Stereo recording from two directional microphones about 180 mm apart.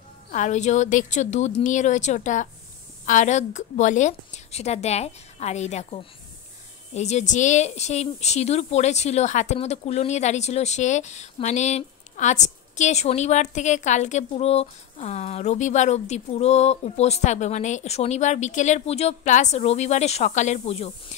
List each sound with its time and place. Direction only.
0.3 s speech: 40° left (ahead or behind)